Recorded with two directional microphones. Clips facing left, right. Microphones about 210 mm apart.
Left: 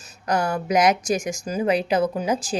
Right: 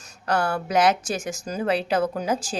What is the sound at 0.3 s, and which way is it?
Speech, 15° left (ahead or behind).